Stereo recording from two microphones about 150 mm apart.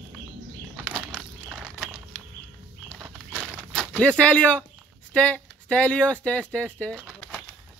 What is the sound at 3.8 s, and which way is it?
Speech, 5° left (ahead or behind).